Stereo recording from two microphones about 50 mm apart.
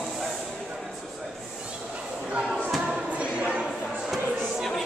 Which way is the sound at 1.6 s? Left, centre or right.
Right.